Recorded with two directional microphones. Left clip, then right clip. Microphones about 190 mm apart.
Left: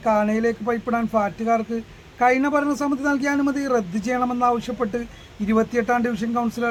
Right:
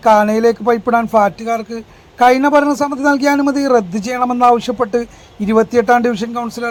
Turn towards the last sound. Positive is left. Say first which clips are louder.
# right 3 dB
turn(degrees=-20)  # may be behind; listen again after turning